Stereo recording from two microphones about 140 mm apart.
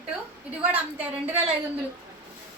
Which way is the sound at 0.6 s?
10° right (ahead or behind).